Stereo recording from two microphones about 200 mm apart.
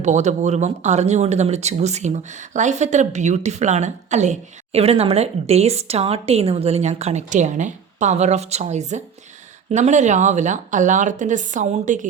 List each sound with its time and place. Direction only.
0.0 s speech: 35° right (ahead or behind)